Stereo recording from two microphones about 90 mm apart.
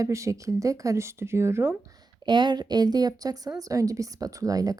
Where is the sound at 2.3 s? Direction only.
55° right (ahead or behind).